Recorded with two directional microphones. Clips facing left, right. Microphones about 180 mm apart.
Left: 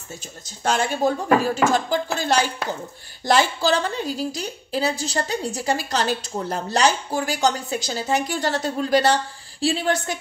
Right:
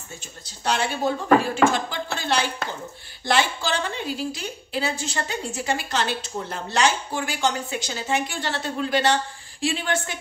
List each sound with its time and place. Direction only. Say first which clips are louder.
0.7 s a woman's voice: left 3 dB; 45° left (ahead or behind)